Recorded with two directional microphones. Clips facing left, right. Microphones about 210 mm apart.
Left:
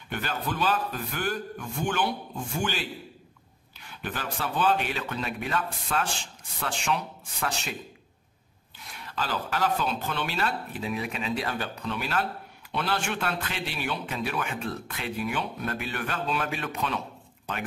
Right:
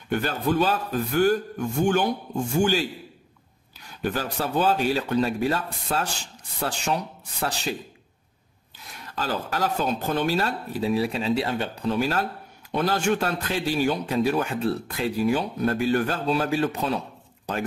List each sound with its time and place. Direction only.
0.1 s a man's voice: 45° right (ahead or behind)
9.0 s speech: 45° right (ahead or behind); by 11.9 s 25° right (ahead or behind)
11.9 s speech: 40° right (ahead or behind)